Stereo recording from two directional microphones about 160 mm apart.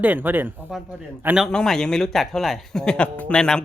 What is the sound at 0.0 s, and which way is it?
Speech, 10° right (ahead or behind).